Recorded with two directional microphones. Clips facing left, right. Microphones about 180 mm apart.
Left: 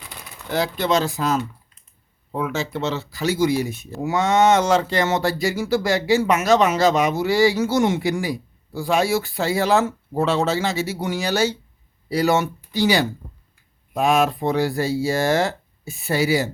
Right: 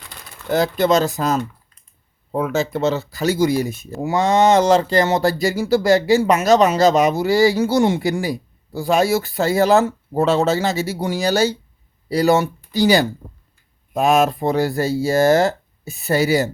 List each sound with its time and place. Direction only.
0.5 s speech: 45° right (ahead or behind)